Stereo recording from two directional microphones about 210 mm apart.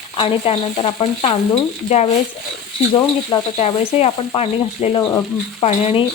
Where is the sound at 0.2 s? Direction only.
25° left (ahead or behind).